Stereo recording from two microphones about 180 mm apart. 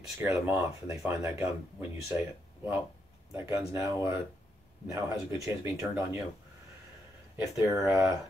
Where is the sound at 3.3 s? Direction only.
15° right (ahead or behind).